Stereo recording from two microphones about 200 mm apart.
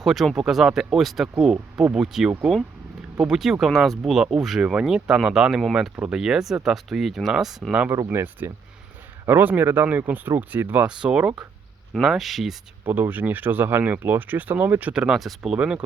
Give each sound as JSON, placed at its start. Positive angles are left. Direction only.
{"t": 0.0, "sound": "speech", "side_deg": 0}